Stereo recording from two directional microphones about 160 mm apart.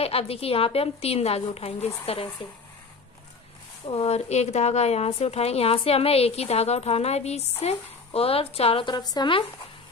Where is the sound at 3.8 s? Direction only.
40° left (ahead or behind).